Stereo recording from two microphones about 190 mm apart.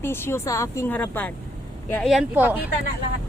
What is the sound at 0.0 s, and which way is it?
A woman's voice, 10° left (ahead or behind).